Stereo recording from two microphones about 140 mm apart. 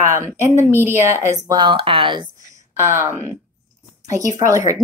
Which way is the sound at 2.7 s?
20° right (ahead or behind).